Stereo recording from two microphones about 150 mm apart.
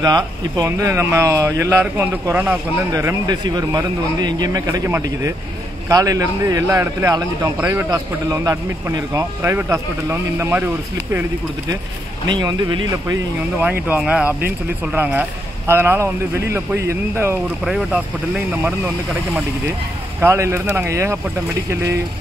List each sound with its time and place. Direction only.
0.0 s a man's voice: 25° right (ahead or behind)
12.3 s a man's voice: 30° right (ahead or behind)
13.8 s speech: 10° right (ahead or behind)
17.6 s a man's voice: 5° right (ahead or behind); by 22.0 s 20° right (ahead or behind)